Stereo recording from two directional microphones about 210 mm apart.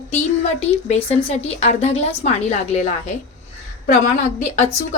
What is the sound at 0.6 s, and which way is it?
A woman's voice, 30° left (ahead or behind).